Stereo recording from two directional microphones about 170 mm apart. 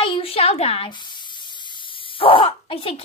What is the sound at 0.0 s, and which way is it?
Spray, 30° left (ahead or behind).